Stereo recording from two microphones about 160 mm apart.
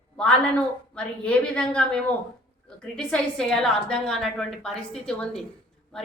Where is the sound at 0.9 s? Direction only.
5° left (ahead or behind).